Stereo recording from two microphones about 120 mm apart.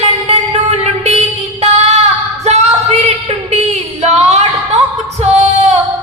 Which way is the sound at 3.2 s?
70° right (ahead or behind).